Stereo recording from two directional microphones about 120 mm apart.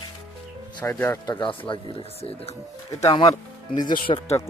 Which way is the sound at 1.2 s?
40° left (ahead or behind).